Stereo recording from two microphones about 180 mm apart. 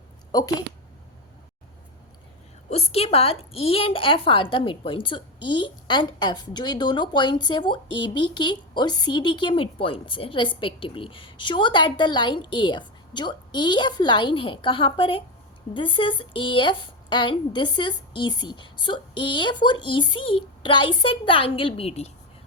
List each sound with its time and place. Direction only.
0.3 s speech: 20° left (ahead or behind)
2.6 s a woman's voice: 35° left (ahead or behind)